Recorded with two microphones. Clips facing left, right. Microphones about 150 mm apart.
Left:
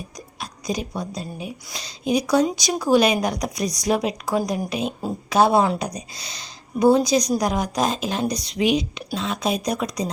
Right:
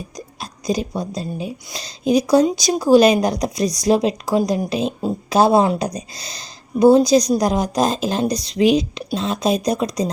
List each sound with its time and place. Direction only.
0.3 s a woman's voice: 35° right (ahead or behind)
6.1 s a woman's voice: 40° right (ahead or behind)